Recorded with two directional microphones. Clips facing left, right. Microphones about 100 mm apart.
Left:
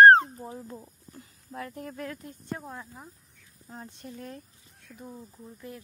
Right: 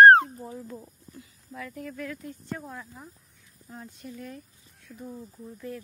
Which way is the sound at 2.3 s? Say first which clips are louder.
Right 1 dB; 20° left (ahead or behind).